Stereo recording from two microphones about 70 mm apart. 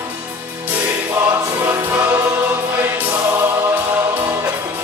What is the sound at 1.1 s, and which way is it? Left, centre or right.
Choir, right.